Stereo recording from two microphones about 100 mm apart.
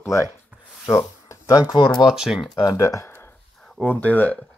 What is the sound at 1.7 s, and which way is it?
Speech, 45° left (ahead or behind).